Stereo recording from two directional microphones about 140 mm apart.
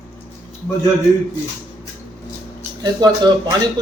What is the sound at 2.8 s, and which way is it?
Speech, 30° right (ahead or behind).